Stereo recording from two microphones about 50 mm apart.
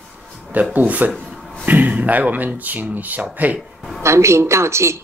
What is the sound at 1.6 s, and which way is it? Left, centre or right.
Speech, right.